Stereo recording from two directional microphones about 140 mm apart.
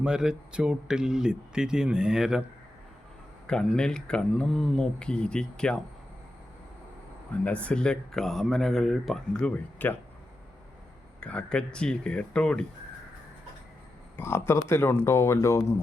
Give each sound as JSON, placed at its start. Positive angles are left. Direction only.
{"t": 0.0, "sound": "speech", "side_deg": -5}
{"t": 3.4, "sound": "speech", "side_deg": 5}
{"t": 7.4, "sound": "speech", "side_deg": 10}
{"t": 11.2, "sound": "speech", "side_deg": 10}
{"t": 14.2, "sound": "speech", "side_deg": 20}